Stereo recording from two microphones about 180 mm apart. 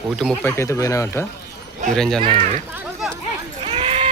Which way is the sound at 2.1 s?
30° right (ahead or behind).